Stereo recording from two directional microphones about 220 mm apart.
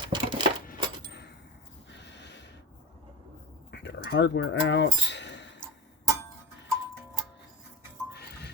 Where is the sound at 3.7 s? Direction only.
50° left (ahead or behind).